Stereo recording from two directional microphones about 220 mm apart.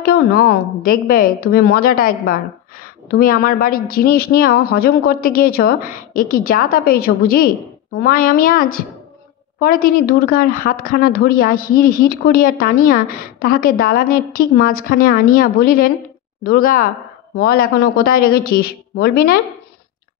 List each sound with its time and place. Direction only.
0.0 s speech: 40° left (ahead or behind)